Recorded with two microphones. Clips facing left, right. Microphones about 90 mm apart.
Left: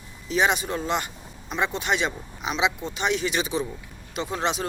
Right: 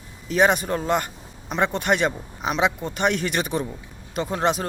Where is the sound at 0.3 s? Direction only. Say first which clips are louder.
Right 4 dB; 50° right (ahead or behind).